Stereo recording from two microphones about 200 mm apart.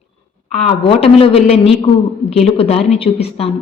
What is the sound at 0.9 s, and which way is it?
A man's voice, 30° left (ahead or behind).